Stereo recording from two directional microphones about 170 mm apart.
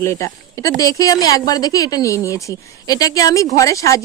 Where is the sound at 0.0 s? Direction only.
15° left (ahead or behind).